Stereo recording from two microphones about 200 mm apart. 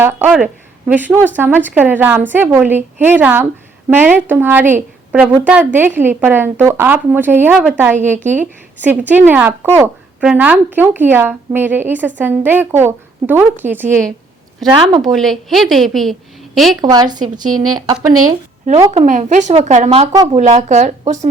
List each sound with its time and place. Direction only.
0.0 s a woman's voice: 10° right (ahead or behind)
8.1 s speech: 35° right (ahead or behind)
8.8 s a woman's voice: 10° right (ahead or behind)
14.7 s speech: 25° right (ahead or behind)
15.1 s a woman's voice: centre (ahead or behind)
16.8 s speech: 20° right (ahead or behind)
17.5 s a woman's voice: 90° right
18.9 s speech: 35° right (ahead or behind)